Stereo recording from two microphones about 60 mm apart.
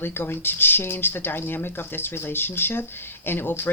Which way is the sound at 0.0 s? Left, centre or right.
Left.